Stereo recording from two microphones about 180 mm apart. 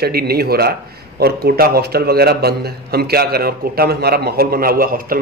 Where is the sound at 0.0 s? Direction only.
60° right (ahead or behind).